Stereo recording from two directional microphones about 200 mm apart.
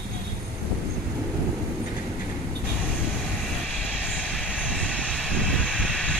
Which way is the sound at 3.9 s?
5° left (ahead or behind).